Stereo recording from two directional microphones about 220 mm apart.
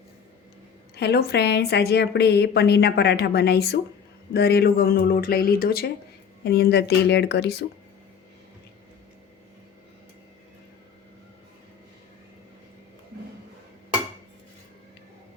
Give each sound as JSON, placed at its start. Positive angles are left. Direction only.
{"t": 0.9, "sound": "a woman's voice", "side_deg": 50}